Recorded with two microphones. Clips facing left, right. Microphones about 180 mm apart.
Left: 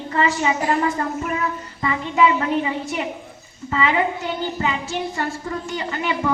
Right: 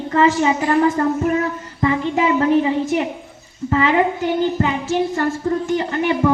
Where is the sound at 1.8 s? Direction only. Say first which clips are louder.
Right 1 dB; 55° right (ahead or behind).